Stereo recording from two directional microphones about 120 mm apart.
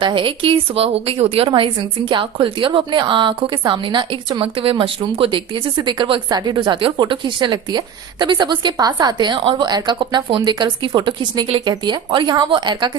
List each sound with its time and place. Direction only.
0.0 s a woman's voice: 45° right (ahead or behind)